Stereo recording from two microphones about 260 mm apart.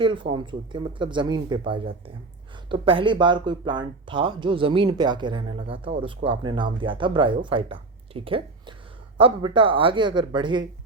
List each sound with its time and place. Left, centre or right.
0.0 s speech: centre